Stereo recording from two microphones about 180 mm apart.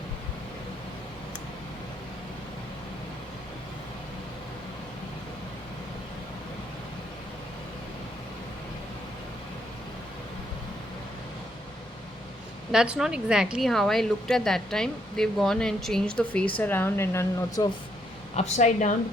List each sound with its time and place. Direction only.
12.7 s speech: 5° right (ahead or behind); by 17.7 s 15° left (ahead or behind)
18.3 s speech: 40° left (ahead or behind)